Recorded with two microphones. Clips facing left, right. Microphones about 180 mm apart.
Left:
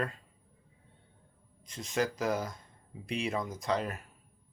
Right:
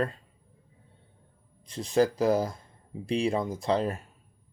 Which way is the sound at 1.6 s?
30° right (ahead or behind).